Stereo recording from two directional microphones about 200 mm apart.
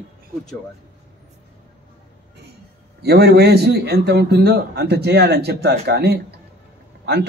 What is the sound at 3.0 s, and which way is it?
A man's voice, 55° right (ahead or behind).